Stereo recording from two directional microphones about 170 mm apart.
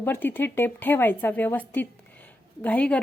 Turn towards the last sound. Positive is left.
turn(degrees=10)  # may be behind; listen again after turning